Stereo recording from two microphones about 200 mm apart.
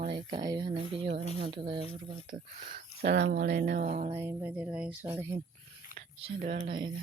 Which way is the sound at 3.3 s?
55° right (ahead or behind).